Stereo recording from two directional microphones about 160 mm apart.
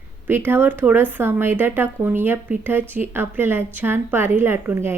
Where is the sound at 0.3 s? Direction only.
15° right (ahead or behind).